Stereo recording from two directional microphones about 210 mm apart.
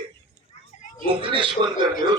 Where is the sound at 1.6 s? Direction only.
25° right (ahead or behind).